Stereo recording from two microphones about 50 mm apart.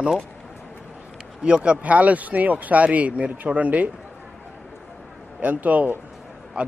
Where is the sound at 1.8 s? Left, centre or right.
Right.